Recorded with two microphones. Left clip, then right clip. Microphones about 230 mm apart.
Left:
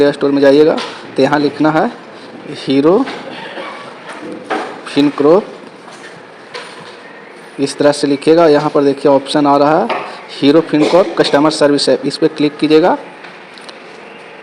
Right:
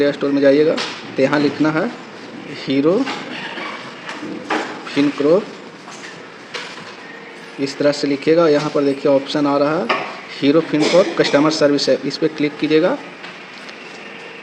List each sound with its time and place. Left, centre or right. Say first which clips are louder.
0.0 s speech: left 5 dB; left
4.9 s speech: left 5 dB; left
7.6 s speech: left 5 dB; left